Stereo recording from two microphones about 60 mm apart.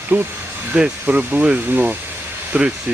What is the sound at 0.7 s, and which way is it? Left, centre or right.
Speech, right.